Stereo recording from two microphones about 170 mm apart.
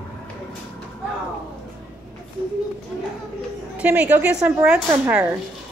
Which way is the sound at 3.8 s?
10° right (ahead or behind).